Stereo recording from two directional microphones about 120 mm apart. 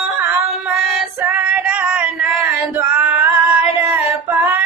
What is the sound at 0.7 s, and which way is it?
Female singing, centre (ahead or behind).